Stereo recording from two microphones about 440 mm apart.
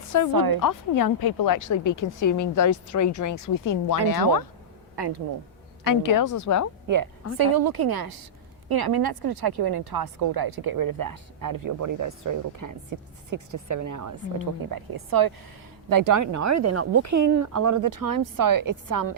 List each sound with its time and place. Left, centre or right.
0.1 s speech: left
4.9 s speech: right
5.8 s speech: left
6.8 s a woman's voice: right